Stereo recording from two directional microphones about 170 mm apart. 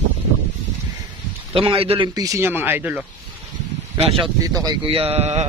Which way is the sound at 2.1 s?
20° right (ahead or behind).